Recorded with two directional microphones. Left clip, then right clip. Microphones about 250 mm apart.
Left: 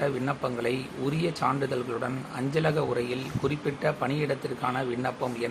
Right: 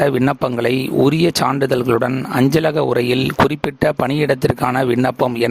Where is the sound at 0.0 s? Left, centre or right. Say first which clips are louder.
Right 12 dB; right.